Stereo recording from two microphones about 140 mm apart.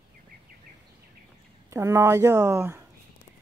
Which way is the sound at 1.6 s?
20° right (ahead or behind).